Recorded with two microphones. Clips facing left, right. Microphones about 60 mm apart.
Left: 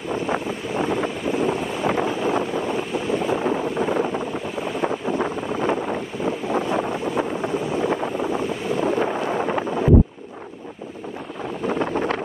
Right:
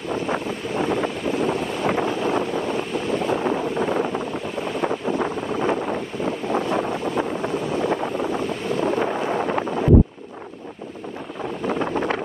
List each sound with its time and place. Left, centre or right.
0.1 s wind noise: centre
11.6 s wind noise: centre